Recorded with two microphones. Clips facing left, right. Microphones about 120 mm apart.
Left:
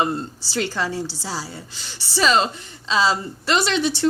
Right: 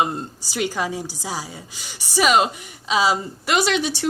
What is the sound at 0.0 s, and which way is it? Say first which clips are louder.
Speech: even; 15° right (ahead or behind).